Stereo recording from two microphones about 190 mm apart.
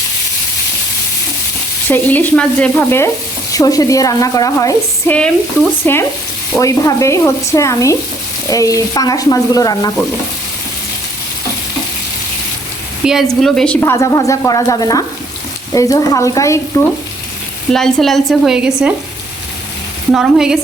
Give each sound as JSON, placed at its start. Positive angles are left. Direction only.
{"t": 1.9, "sound": "a woman's voice", "side_deg": 10}
{"t": 13.1, "sound": "a woman's voice", "side_deg": 0}
{"t": 17.7, "sound": "speech", "side_deg": 5}
{"t": 20.1, "sound": "speech", "side_deg": 0}